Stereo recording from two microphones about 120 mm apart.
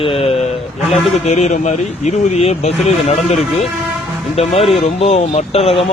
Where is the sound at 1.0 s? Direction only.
70° left (ahead or behind).